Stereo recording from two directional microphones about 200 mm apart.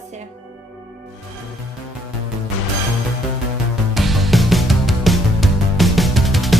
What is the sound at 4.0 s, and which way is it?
Music, centre (ahead or behind).